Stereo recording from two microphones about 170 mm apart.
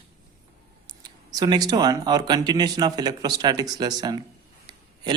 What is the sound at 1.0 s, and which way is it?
Speech, 25° right (ahead or behind).